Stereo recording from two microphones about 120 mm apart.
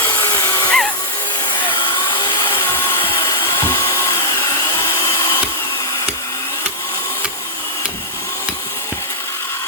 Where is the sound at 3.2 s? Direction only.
45° left (ahead or behind).